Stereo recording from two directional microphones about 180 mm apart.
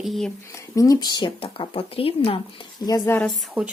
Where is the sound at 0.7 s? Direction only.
20° left (ahead or behind).